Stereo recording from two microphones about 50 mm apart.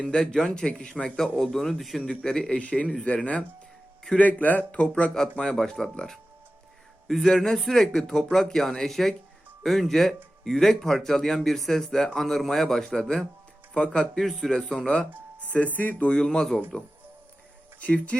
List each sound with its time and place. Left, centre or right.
0.0 s speech: centre
1.4 s speech: centre
2.0 s speech: centre
2.6 s speech: left
4.2 s speech: left
5.4 s speech: centre
7.1 s speech: centre
15.4 s speech: left
16.0 s speech: centre
17.7 s speech: left